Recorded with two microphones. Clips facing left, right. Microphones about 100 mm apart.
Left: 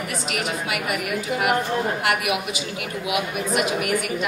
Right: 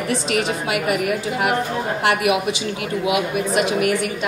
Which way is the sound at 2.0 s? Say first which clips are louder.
Right 5 dB; 30° right (ahead or behind).